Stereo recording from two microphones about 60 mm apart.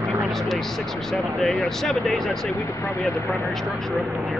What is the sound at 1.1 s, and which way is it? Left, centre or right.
Speech, centre.